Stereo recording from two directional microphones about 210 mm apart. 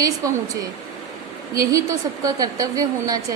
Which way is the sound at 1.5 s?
15° right (ahead or behind).